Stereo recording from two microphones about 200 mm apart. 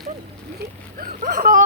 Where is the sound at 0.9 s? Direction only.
45° right (ahead or behind).